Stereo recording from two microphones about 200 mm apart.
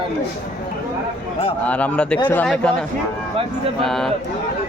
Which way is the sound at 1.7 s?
5° left (ahead or behind).